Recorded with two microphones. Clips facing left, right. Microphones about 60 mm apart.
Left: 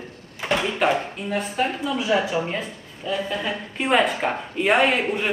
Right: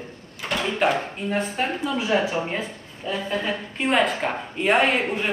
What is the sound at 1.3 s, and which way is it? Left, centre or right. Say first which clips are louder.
Speech: left 1 dB; right.